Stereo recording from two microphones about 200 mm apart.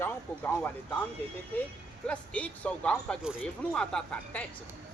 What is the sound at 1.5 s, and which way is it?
A man's voice, 10° left (ahead or behind).